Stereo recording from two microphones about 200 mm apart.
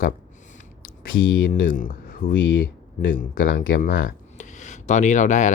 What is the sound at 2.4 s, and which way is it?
Speech, 75° left (ahead or behind).